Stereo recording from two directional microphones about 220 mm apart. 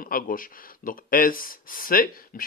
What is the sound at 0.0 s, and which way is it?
Speech, 40° left (ahead or behind).